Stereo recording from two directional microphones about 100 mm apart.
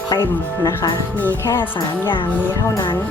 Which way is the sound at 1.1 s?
20° left (ahead or behind).